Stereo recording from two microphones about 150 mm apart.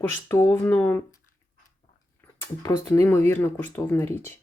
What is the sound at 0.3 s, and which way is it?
Speech, 15° left (ahead or behind).